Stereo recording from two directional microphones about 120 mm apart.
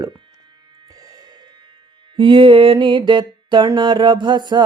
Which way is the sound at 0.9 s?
30° right (ahead or behind).